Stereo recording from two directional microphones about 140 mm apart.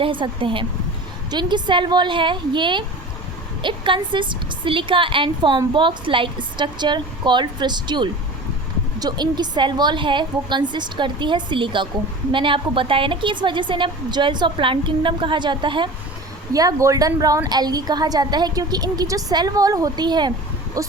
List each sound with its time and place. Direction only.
0.0 s a woman's voice: 35° right (ahead or behind)